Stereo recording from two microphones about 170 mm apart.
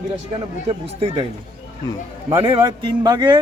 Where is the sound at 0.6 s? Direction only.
35° right (ahead or behind).